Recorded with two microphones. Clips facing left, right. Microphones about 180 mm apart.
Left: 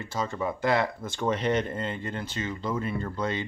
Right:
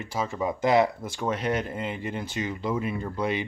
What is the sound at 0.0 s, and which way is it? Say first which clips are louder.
Speech: right 1 dB; 10° right (ahead or behind).